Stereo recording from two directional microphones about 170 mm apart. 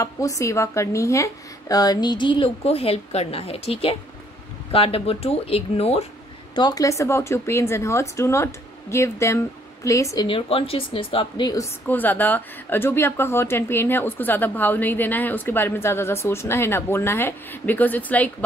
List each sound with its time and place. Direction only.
0.0 s speech: 20° left (ahead or behind); by 6.0 s 35° left (ahead or behind)
6.5 s a woman's voice: 25° left (ahead or behind)
10.2 s speech: 30° left (ahead or behind)
11.9 s a woman's voice: 10° left (ahead or behind)